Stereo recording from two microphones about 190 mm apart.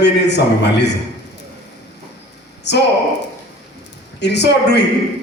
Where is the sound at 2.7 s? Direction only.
65° left (ahead or behind).